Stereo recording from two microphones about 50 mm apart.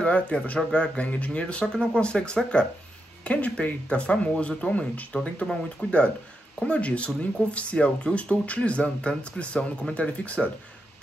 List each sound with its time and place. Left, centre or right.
0.0 s speech: left
5.5 s speech: centre
6.6 s speech: left